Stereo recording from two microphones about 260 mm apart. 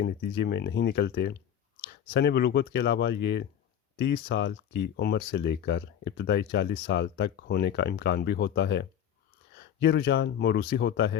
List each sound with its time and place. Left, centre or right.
0.0 s speech: left